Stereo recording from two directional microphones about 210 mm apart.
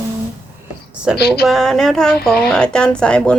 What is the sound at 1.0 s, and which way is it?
Speech, centre (ahead or behind).